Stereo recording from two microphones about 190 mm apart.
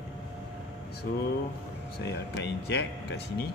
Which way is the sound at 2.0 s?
65° left (ahead or behind).